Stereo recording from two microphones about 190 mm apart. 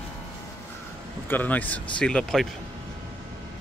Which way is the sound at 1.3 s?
10° left (ahead or behind).